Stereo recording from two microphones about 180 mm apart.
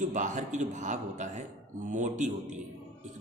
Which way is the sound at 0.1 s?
45° right (ahead or behind).